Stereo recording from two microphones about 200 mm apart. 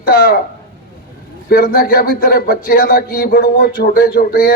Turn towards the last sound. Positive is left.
turn(degrees=45)  # may be behind; listen again after turning